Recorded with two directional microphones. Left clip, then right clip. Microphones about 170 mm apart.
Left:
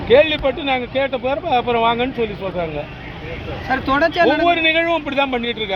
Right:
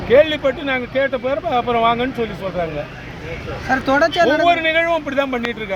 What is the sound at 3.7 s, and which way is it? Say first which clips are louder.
Speech: right 1 dB; 90° right.